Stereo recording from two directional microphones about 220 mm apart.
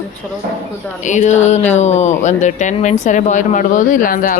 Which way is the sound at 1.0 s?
35° left (ahead or behind).